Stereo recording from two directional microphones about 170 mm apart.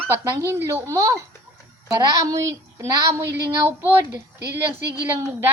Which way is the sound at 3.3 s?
80° right.